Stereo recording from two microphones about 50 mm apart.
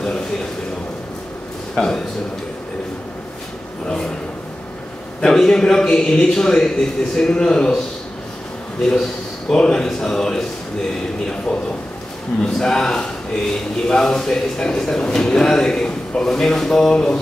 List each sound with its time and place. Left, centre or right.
1.8 s a man's voice: centre
3.8 s a sound: centre
5.2 s a man's voice: centre
8.8 s a man's voice: centre